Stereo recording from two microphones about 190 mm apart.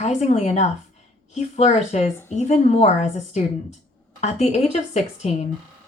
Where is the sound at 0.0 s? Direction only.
35° left (ahead or behind).